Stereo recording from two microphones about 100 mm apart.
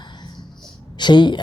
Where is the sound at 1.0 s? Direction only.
50° left (ahead or behind).